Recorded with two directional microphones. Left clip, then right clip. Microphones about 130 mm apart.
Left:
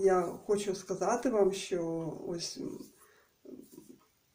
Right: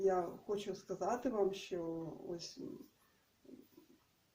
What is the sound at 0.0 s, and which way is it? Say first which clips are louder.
Speech: left 7 dB; 25° right (ahead or behind).